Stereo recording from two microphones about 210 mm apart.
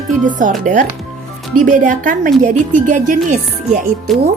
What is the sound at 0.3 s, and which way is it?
Music, 40° right (ahead or behind).